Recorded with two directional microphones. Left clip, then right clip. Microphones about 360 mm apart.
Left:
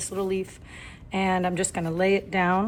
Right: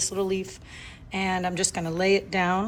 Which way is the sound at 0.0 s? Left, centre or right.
Centre.